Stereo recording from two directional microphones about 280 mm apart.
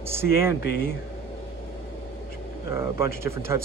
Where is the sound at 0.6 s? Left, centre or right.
Left.